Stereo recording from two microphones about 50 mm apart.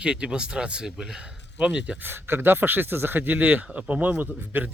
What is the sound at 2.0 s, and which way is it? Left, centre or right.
Speech, right.